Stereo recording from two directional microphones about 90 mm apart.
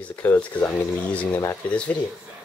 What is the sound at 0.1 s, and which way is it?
Speech, 20° left (ahead or behind).